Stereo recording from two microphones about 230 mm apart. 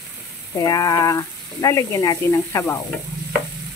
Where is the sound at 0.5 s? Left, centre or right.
Centre.